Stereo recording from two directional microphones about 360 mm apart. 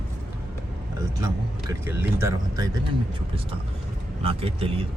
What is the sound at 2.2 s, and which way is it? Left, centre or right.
Speech, centre.